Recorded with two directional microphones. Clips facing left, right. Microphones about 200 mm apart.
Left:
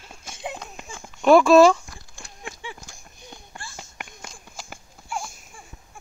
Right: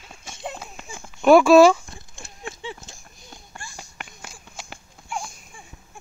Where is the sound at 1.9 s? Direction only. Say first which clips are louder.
Right 2 dB; 25° right (ahead or behind).